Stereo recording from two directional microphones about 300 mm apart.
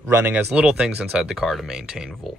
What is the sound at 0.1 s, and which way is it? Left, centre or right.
Speech, centre.